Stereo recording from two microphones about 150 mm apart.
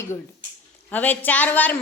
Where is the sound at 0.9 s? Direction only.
10° left (ahead or behind).